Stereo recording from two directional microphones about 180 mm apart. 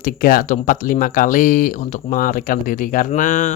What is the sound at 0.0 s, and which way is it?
Speech, 50° left (ahead or behind).